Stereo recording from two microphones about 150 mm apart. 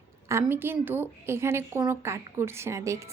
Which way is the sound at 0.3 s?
15° right (ahead or behind).